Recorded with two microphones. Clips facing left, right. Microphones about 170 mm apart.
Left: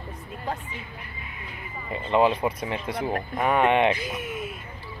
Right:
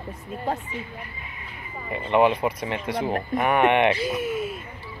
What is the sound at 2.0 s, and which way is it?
Speech, 15° right (ahead or behind).